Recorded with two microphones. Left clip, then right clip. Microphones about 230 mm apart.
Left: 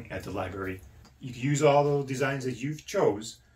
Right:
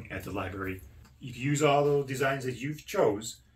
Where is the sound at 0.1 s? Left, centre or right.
Centre.